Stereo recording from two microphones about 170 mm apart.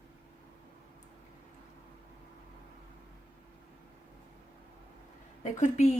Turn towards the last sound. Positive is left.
turn(degrees=45)  # may be behind; listen again after turning